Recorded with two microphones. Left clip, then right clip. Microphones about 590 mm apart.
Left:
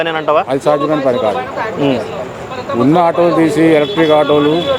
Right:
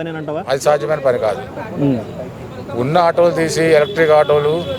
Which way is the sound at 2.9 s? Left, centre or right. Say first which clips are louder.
Left 1 dB; right.